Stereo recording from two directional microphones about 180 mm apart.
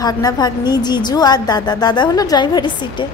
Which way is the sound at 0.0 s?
20° left (ahead or behind).